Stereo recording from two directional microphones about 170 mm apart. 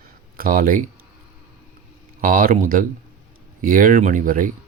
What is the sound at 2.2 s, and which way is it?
Speech, 55° right (ahead or behind).